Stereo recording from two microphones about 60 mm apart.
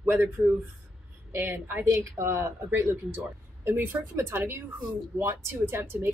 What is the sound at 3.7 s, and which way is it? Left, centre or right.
Speech, right.